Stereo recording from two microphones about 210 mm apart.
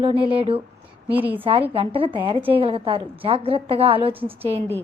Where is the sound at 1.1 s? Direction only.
10° right (ahead or behind).